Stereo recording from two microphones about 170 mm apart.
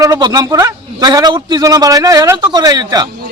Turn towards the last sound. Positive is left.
turn(degrees=-25)  # may be behind; listen again after turning